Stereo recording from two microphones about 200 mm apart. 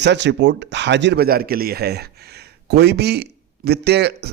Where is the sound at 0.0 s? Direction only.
60° right (ahead or behind).